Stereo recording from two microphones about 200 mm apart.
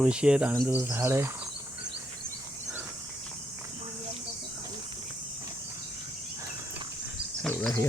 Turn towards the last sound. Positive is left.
turn(degrees=5)  # may be behind; listen again after turning